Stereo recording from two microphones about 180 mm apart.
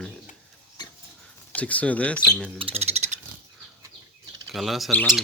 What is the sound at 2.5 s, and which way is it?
Speech, 30° right (ahead or behind).